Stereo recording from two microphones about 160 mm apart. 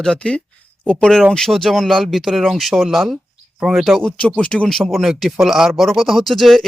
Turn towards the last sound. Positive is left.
turn(degrees=0)  # may be behind; listen again after turning